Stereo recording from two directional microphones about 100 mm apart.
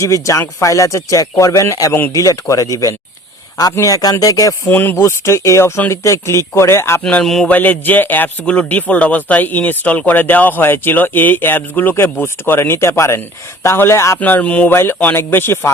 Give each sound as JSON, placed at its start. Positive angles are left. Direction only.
{"t": 0.0, "sound": "speech", "side_deg": 30}
{"t": 4.7, "sound": "speech", "side_deg": 20}
{"t": 7.0, "sound": "speech", "side_deg": 10}
{"t": 7.4, "sound": "speech", "side_deg": 15}
{"t": 14.2, "sound": "speech", "side_deg": 15}